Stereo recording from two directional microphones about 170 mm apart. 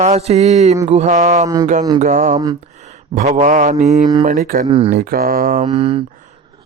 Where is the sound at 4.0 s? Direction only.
25° right (ahead or behind).